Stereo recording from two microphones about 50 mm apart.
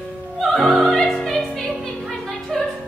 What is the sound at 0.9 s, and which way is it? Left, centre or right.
Opera, centre.